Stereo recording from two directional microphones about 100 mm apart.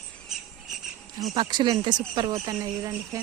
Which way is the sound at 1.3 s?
50° right (ahead or behind).